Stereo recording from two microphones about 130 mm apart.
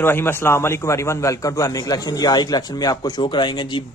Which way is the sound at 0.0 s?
15° left (ahead or behind).